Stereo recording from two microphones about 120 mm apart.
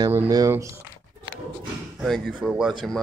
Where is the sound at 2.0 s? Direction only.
Centre (ahead or behind).